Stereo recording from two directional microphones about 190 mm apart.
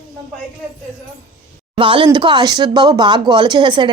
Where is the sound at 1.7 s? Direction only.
25° right (ahead or behind).